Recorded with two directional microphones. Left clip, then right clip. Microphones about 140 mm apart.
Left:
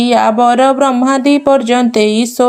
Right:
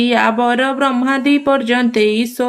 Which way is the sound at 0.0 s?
30° left (ahead or behind).